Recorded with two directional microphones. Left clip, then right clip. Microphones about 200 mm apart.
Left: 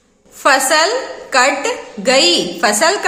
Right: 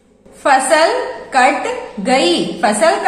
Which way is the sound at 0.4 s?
40° left (ahead or behind).